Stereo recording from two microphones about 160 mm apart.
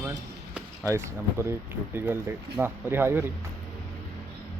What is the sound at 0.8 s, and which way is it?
Speech, 15° right (ahead or behind).